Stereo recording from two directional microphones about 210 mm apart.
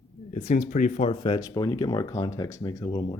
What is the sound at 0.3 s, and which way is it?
Speech, 35° left (ahead or behind).